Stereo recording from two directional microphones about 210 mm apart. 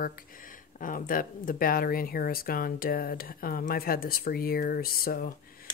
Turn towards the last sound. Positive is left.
turn(degrees=45)  # may be behind; listen again after turning